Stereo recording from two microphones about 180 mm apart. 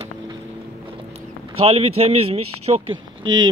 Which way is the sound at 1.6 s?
35° right (ahead or behind).